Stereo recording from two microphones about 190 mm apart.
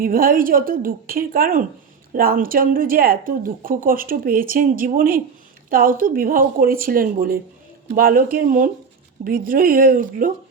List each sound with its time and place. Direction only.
0.0 s speech: 50° right (ahead or behind)